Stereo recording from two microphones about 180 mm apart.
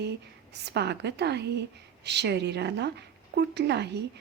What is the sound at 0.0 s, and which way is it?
A woman's voice, 70° right (ahead or behind).